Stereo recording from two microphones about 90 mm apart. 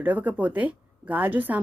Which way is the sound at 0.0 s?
15° right (ahead or behind).